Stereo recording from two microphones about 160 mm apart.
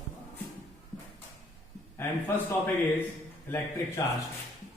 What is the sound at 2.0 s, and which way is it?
Speech, 15° left (ahead or behind).